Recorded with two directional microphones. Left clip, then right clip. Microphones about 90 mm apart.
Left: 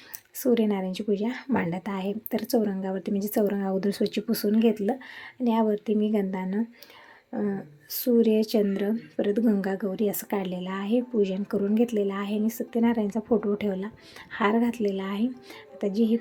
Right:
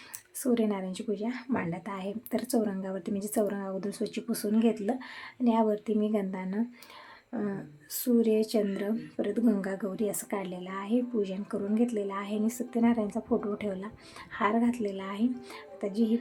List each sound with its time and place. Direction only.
0.4 s speech: 35° left (ahead or behind)
7.3 s speech: 15° left (ahead or behind)
8.3 s speech: 35° left (ahead or behind)